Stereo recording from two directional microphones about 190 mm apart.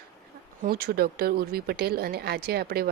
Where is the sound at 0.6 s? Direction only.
50° right (ahead or behind).